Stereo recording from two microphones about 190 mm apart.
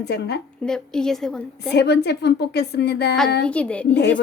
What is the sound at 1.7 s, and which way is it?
Speech, 60° left (ahead or behind).